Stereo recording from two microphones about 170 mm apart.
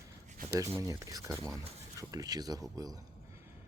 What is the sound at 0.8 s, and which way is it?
Speech, 20° right (ahead or behind).